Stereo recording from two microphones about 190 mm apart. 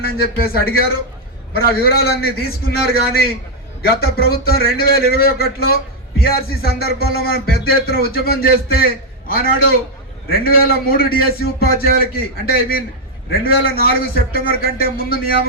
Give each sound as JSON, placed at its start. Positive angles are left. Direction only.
{"t": 0.0, "sound": "speech", "side_deg": 55}